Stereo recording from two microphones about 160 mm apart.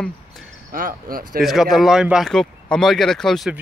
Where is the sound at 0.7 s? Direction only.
60° right (ahead or behind).